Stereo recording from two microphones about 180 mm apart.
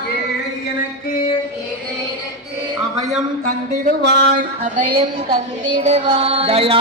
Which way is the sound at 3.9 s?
70° right (ahead or behind).